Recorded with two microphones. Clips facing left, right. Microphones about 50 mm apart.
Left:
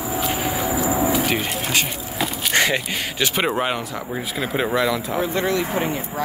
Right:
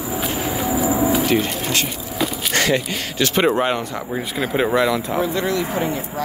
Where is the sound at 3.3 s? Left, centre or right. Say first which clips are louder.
Right 6 dB; centre.